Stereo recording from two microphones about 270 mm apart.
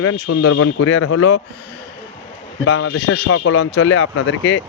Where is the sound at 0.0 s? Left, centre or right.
Left.